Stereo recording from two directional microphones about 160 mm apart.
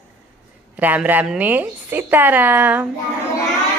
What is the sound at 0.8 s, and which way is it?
A woman's voice, 10° right (ahead or behind).